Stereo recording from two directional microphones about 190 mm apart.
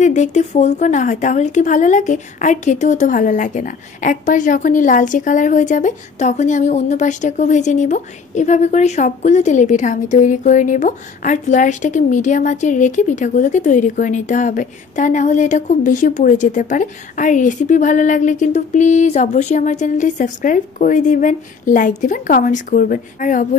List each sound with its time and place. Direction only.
0.0 s a woman's voice: 40° left (ahead or behind)